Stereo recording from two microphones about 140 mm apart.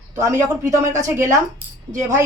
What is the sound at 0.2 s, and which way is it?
Speech, 25° right (ahead or behind).